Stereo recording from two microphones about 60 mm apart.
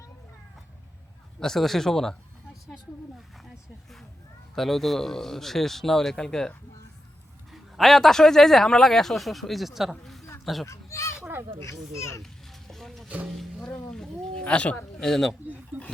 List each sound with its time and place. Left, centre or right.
1.4 s speech: centre
4.5 s a man's voice: centre
7.5 s a man's voice: centre
10.0 s a sound: centre
10.4 s speech: centre
10.7 s children playing: left
11.9 s a child's voice: left
12.2 s a sound: centre; by 14.8 s left
14.9 s speech: centre
15.7 s speech: right